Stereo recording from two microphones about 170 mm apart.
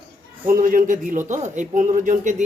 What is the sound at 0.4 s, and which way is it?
A man's voice, 55° right (ahead or behind).